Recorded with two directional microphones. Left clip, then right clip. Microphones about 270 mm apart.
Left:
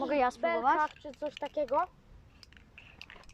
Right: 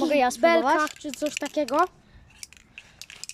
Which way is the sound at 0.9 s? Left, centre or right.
Right.